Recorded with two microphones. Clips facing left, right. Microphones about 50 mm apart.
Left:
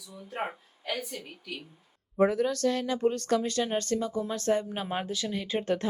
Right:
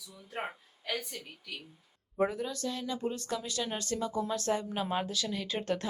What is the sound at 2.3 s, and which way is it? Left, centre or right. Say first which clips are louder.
Speech: left 9 dB; left.